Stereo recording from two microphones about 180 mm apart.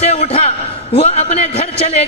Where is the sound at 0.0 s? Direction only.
35° left (ahead or behind).